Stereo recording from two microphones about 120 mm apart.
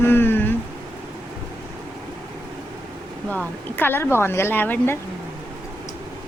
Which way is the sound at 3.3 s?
15° left (ahead or behind).